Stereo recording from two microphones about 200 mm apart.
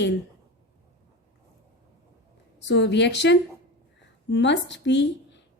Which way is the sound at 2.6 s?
60° left (ahead or behind).